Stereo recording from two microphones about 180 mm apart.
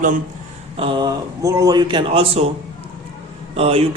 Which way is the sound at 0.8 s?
25° right (ahead or behind).